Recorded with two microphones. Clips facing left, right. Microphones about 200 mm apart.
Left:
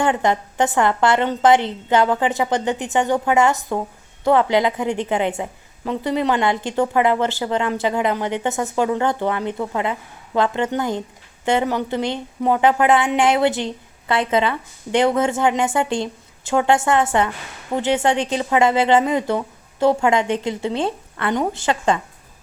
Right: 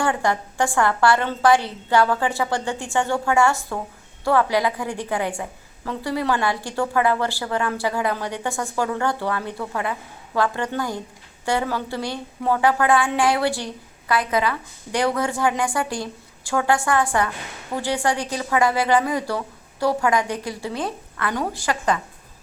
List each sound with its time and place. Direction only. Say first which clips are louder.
0.0 s a woman's voice: left 3 dB; 20° left (ahead or behind)